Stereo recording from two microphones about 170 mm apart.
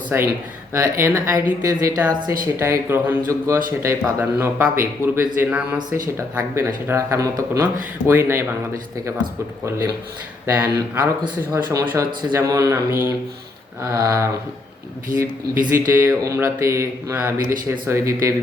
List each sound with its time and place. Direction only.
0.1 s speech: 10° right (ahead or behind)
9.6 s speech: 15° right (ahead or behind)
13.9 s a sound: 20° right (ahead or behind)
15.7 s speech: 15° right (ahead or behind)